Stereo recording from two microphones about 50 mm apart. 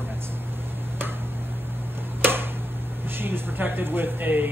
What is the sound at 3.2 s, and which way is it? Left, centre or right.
Speech, right.